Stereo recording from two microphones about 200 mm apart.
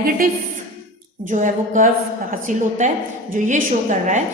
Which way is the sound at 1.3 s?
40° right (ahead or behind).